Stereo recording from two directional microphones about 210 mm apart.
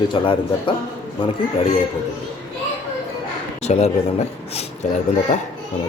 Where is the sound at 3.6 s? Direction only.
30° left (ahead or behind).